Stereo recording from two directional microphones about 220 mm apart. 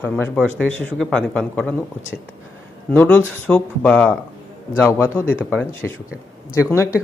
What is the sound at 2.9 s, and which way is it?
Speech, 10° left (ahead or behind).